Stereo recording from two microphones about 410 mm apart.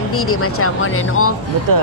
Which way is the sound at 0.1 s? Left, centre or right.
Left.